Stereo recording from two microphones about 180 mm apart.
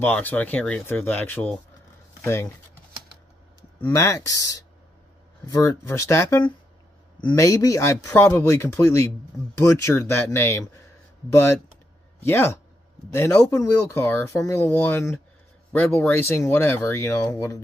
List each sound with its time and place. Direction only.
0.0 s speech: 10° left (ahead or behind)
3.8 s speech: 15° left (ahead or behind)
12.3 s speech: 10° left (ahead or behind)